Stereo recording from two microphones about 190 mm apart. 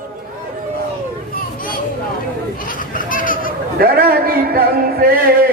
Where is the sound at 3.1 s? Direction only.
45° left (ahead or behind).